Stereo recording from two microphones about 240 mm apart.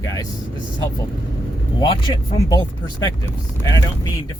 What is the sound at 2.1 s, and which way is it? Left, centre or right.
Speech, left.